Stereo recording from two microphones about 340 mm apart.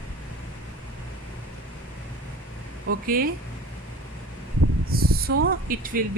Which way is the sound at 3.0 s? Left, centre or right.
Right.